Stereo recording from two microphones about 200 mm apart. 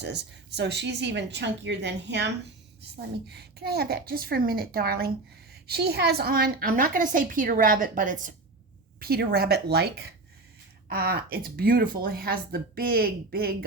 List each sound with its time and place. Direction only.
0.0 s a woman's voice: 60° right (ahead or behind)